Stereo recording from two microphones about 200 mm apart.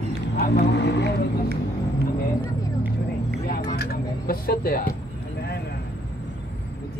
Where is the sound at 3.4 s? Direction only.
50° left (ahead or behind).